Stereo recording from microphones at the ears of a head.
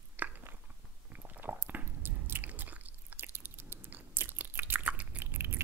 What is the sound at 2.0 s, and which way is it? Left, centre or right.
Biting, right.